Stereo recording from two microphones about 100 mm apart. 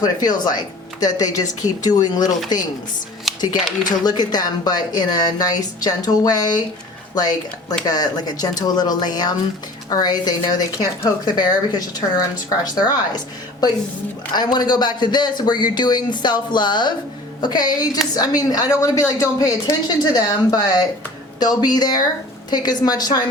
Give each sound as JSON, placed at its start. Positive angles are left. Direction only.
{"t": 0.0, "sound": "a woman's voice", "side_deg": 40}